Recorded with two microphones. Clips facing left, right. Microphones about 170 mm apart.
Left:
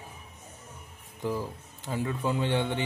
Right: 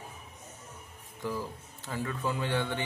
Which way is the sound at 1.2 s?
20° left (ahead or behind).